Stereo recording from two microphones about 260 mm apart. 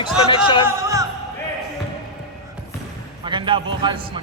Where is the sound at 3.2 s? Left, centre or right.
Centre.